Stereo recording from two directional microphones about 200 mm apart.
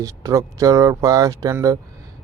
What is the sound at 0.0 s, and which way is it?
Speech, 15° right (ahead or behind).